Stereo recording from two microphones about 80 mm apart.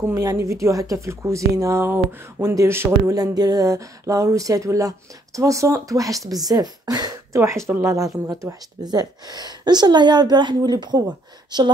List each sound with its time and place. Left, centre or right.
0.2 s speech: right
1.9 s speech: right
2.4 s speech: right
3.1 s speech: right
7.3 s speech: right